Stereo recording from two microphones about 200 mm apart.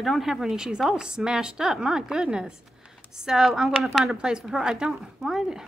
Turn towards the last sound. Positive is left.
turn(degrees=0)  # may be behind; listen again after turning